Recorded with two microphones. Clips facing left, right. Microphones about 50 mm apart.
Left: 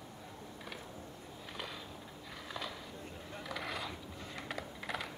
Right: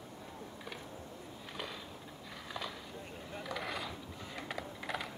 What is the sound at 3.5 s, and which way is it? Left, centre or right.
Mechanisms, centre.